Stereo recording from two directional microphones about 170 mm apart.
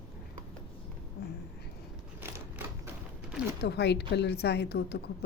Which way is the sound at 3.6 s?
75° left (ahead or behind).